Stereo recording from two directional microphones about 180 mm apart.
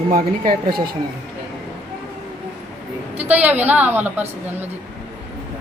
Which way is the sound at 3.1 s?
10° right (ahead or behind).